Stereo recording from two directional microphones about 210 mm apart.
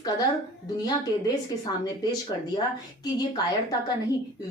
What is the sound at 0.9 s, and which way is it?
A woman's voice, 20° left (ahead or behind).